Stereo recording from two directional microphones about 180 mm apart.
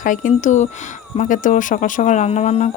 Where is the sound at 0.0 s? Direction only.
45° left (ahead or behind).